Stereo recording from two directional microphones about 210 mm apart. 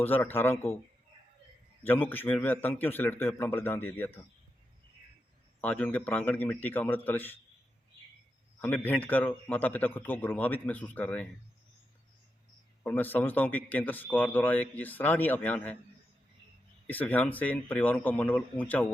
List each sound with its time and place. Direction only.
0.0 s a man's voice: 10° left (ahead or behind)
1.8 s a man's voice: 10° left (ahead or behind)
5.5 s a man's voice: 5° left (ahead or behind)
8.6 s a man's voice: 10° left (ahead or behind)
12.8 s a man's voice: 10° left (ahead or behind)
16.8 s a man's voice: 10° left (ahead or behind)